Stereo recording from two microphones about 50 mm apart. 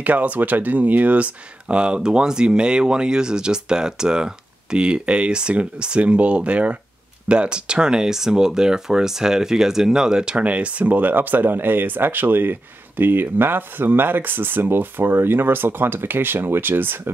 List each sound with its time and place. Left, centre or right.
0.0 s speech: right